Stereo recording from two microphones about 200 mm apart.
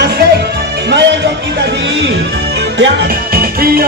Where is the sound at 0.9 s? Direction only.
60° right (ahead or behind).